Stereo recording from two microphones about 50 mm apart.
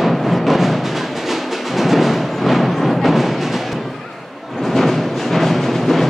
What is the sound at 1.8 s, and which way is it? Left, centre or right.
Music, centre.